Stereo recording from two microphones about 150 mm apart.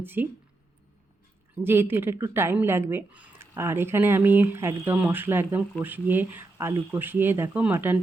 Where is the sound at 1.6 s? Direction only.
15° right (ahead or behind).